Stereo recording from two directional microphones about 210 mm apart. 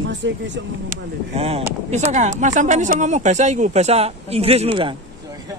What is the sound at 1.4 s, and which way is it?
Speech, 30° right (ahead or behind).